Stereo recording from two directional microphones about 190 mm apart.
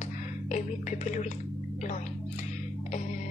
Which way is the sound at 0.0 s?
40° left (ahead or behind).